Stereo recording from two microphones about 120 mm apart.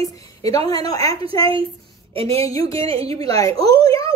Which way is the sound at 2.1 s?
55° right (ahead or behind).